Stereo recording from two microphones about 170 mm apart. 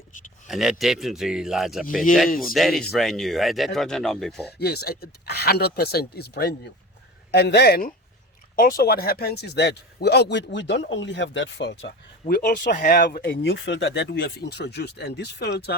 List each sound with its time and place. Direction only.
0.4 s speech: centre (ahead or behind)
4.5 s speech: 70° left (ahead or behind); by 11.9 s 90° left
12.3 s speech: 60° left (ahead or behind); by 15.7 s 75° left (ahead or behind)